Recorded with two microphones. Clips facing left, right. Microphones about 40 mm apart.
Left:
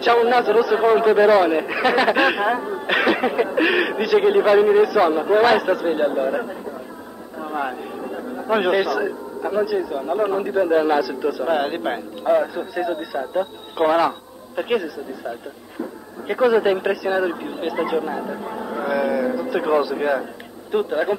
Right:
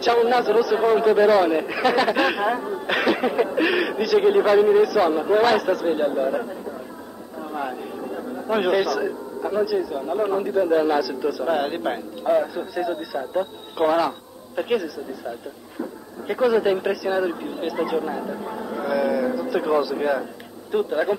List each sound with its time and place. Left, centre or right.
0.0 s a man's voice: left
3.8 s a man's voice: left